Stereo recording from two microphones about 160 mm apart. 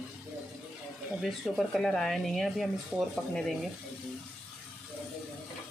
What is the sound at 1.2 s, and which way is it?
Speech, centre (ahead or behind).